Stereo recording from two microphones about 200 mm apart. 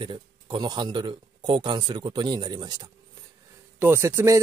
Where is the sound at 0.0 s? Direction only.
25° right (ahead or behind).